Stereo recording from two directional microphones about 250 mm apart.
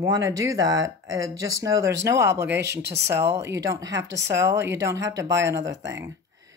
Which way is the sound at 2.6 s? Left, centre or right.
Right.